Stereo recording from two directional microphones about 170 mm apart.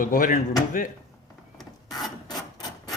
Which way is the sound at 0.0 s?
50° left (ahead or behind).